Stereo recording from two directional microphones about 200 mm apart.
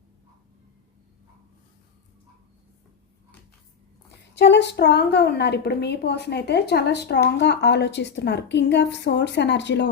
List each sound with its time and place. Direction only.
4.4 s a woman's voice: 60° left (ahead or behind)